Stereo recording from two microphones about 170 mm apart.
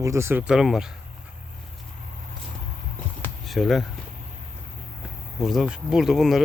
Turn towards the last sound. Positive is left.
turn(degrees=0)  # may be behind; listen again after turning